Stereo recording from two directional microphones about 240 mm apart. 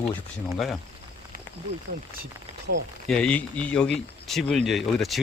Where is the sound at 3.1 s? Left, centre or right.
Centre.